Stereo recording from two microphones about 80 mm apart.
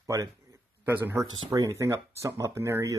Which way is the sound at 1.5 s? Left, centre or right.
Right.